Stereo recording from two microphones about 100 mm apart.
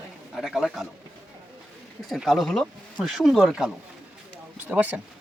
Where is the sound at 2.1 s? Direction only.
Centre (ahead or behind).